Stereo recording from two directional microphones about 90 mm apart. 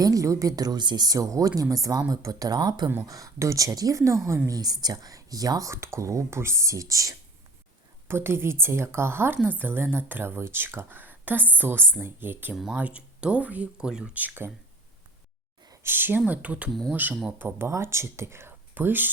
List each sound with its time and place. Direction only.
0.0 s speech: 35° right (ahead or behind)
3.0 s speech: 40° right (ahead or behind)
8.0 s a woman's voice: 25° right (ahead or behind)
15.8 s a woman's voice: 25° right (ahead or behind)